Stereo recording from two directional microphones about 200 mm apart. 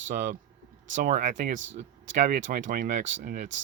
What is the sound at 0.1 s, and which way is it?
Speech, 40° right (ahead or behind).